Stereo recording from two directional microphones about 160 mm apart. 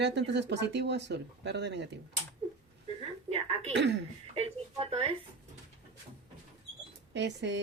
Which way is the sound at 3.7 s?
90° right.